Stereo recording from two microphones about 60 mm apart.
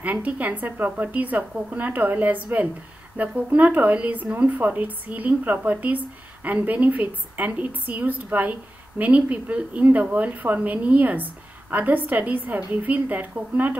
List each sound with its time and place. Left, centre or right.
0.0 s speech: right